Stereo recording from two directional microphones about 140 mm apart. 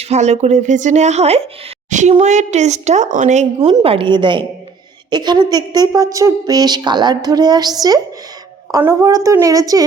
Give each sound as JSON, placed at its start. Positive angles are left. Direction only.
{"t": 0.0, "sound": "a woman's voice", "side_deg": -50}